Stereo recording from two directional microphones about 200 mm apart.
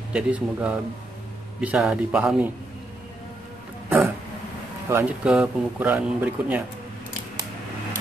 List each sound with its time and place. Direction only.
0.1 s speech: 5° right (ahead or behind)
4.8 s speech: 10° right (ahead or behind)